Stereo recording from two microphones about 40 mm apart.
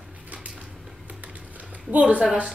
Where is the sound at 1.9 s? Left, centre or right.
Right.